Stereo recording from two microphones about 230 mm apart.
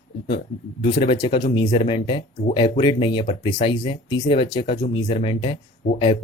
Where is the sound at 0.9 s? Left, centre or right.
Centre.